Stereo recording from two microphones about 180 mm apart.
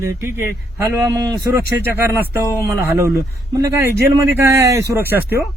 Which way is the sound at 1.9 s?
10° right (ahead or behind).